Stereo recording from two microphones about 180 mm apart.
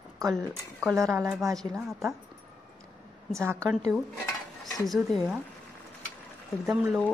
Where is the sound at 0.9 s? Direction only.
15° right (ahead or behind).